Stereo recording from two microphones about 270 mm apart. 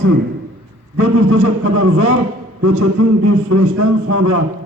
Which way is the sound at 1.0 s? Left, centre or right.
Right.